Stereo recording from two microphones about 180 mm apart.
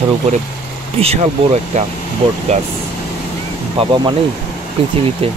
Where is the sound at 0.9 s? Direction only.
35° right (ahead or behind).